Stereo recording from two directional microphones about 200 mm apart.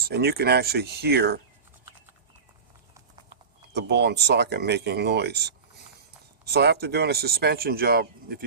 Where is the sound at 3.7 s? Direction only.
60° right (ahead or behind).